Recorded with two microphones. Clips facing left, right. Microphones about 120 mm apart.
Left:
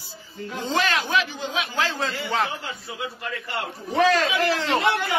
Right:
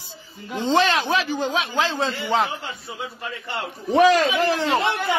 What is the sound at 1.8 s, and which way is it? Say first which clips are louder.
A man's voice: right 1 dB; 25° right (ahead or behind).